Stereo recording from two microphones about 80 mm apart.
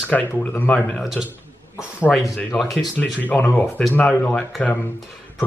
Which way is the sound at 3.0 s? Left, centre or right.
Centre.